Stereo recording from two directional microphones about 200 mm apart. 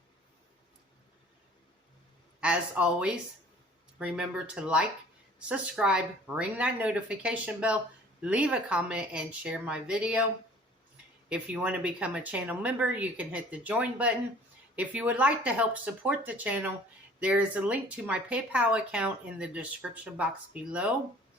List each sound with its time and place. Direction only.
2.4 s speech: 5° right (ahead or behind)
11.3 s speech: 5° right (ahead or behind)